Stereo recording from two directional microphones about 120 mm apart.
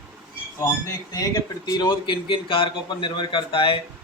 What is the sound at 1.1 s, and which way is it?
Speech, 30° left (ahead or behind).